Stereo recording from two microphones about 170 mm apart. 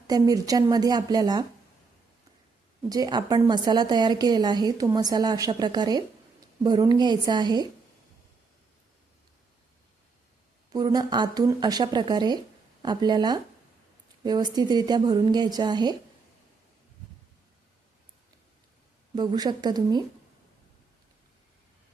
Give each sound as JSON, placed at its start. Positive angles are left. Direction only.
{"t": 0.1, "sound": "a woman's voice", "side_deg": -20}
{"t": 2.9, "sound": "a woman's voice", "side_deg": -25}
{"t": 10.7, "sound": "a woman's voice", "side_deg": -20}
{"t": 19.1, "sound": "a woman's voice", "side_deg": -25}